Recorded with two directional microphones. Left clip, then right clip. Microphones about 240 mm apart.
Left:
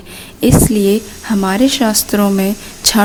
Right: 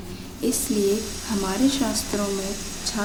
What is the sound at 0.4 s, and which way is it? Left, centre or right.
A woman's voice, left.